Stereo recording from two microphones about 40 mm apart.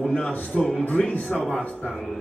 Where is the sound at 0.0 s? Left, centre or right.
Left.